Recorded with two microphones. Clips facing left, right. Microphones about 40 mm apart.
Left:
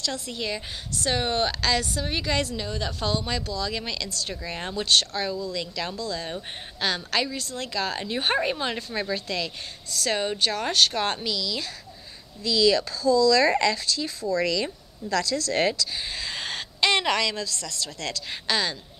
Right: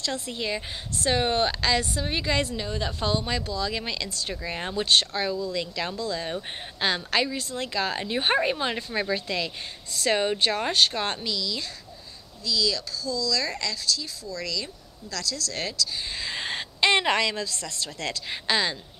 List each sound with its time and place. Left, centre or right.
0.0 s a woman's voice: centre
10.7 s speech: centre
12.4 s speech: centre
16.1 s a woman's voice: centre